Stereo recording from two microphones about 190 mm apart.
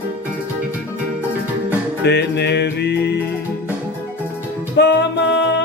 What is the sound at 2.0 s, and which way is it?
Music, 60° left (ahead or behind).